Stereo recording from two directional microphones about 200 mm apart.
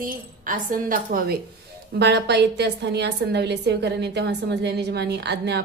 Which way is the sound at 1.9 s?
55° right (ahead or behind).